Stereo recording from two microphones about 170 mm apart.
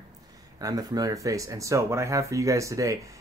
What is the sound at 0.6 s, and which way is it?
Speech, 20° right (ahead or behind).